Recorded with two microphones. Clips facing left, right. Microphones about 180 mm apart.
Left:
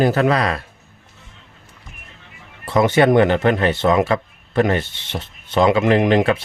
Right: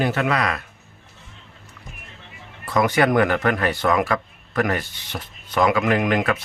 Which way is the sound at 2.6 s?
25° left (ahead or behind).